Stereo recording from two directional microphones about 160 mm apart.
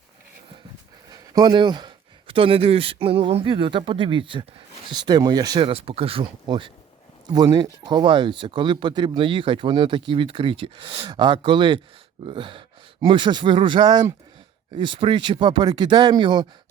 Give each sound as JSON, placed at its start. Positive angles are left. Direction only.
{"t": 1.1, "sound": "speech", "side_deg": -25}